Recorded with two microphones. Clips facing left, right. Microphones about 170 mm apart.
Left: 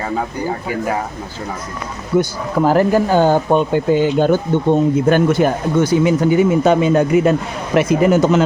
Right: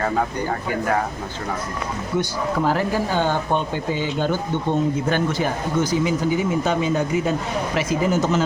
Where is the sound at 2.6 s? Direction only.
45° left (ahead or behind).